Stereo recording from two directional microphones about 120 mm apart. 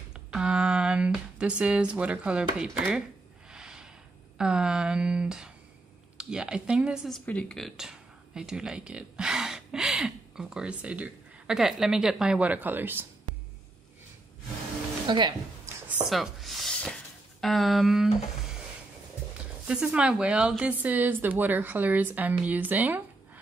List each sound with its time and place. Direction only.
0.1 s a sound: 5° right (ahead or behind)
4.4 s speech: 5° right (ahead or behind)
7.2 s speech: 10° left (ahead or behind); by 13.0 s 15° right (ahead or behind)
15.0 s speech: 40° right (ahead or behind)
15.9 s a sound: 5° right (ahead or behind)
17.4 s speech: centre (ahead or behind)